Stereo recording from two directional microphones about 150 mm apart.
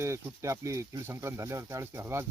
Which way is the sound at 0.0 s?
20° right (ahead or behind).